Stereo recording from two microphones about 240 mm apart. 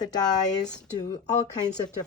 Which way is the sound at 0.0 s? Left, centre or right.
Centre.